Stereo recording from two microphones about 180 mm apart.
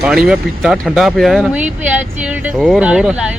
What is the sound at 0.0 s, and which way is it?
Speech, 5° right (ahead or behind).